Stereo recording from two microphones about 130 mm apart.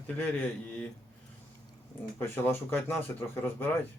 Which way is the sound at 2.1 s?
15° left (ahead or behind).